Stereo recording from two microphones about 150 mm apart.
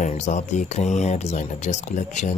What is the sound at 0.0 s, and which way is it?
Speech, 50° left (ahead or behind).